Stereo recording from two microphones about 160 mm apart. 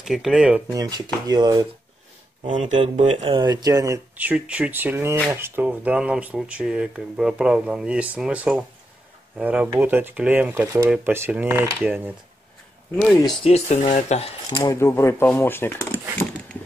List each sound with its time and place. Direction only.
0.0 s speech: 5° right (ahead or behind)
0.7 s speech: 25° right (ahead or behind)
2.5 s speech: 45° right (ahead or behind)
3.3 s speech: 25° right (ahead or behind)
4.2 s speech: 10° right (ahead or behind)
12.9 s speech: 5° left (ahead or behind)
13.4 s speech: 40° left (ahead or behind)
14.5 s speech: 25° left (ahead or behind)